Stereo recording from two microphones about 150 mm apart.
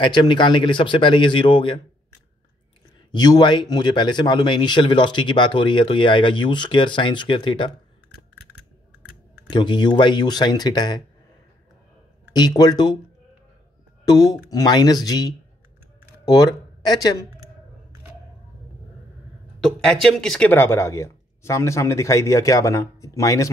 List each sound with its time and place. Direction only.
0.0 s speech: 30° left (ahead or behind)
3.1 s speech: 30° left (ahead or behind)
9.5 s speech: 30° left (ahead or behind)
12.3 s speech: 25° left (ahead or behind)
14.0 s speech: 25° left (ahead or behind)
19.6 s speech: 5° left (ahead or behind); by 23.5 s 20° left (ahead or behind)